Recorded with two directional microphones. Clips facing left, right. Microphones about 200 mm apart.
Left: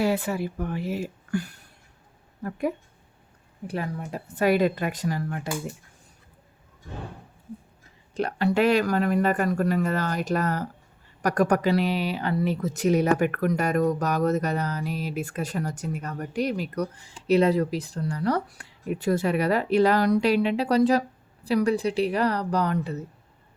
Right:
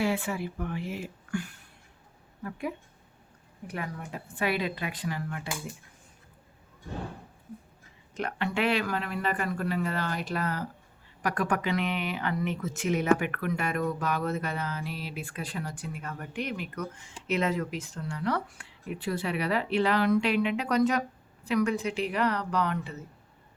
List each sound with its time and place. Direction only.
0.0 s speech: 40° left (ahead or behind)
3.7 s speech: 30° left (ahead or behind)
8.1 s speech: 35° left (ahead or behind)